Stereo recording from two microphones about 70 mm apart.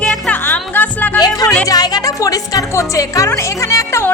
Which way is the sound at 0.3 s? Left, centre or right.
Left.